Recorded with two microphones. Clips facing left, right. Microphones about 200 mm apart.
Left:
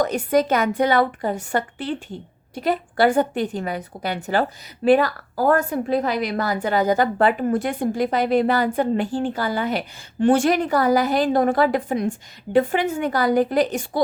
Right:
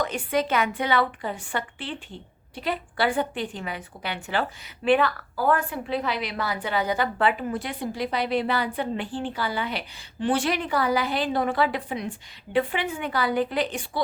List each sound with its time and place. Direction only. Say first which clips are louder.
0.0 s a woman's voice: left 6 dB; 40° left (ahead or behind)